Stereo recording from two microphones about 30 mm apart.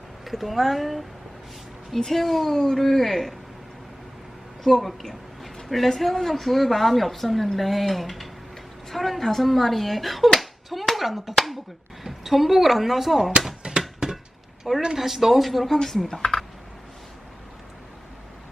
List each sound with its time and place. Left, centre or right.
0.3 s speech: centre
2.0 s speech: centre
4.6 s speech: centre
10.7 s a sound: centre
12.0 s speech: centre
13.7 s a sound: right
14.9 s speech: centre